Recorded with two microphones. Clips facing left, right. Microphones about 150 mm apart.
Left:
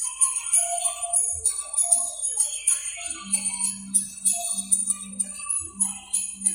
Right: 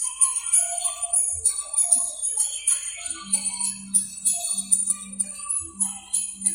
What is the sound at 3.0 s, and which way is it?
Music, 10° left (ahead or behind).